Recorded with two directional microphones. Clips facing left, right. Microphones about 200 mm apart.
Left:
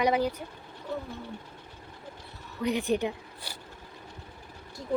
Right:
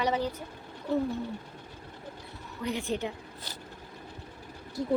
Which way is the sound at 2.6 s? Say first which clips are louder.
Left 5 dB; 15° left (ahead or behind).